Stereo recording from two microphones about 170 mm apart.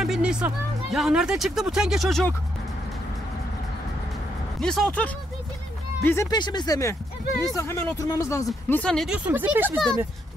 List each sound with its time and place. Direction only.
0.0 s music: 5° right (ahead or behind)
0.9 s speech: 5° right (ahead or behind)
4.6 s speech: 5° left (ahead or behind)
6.3 s speech: 25° left (ahead or behind); by 9.8 s 10° right (ahead or behind)